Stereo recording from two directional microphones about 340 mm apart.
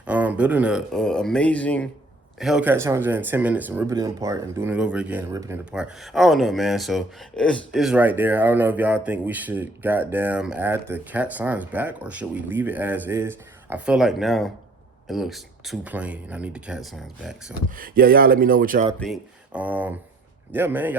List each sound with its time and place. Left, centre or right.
0.0 s speech: centre
17.7 s speech: right
18.9 s speech: centre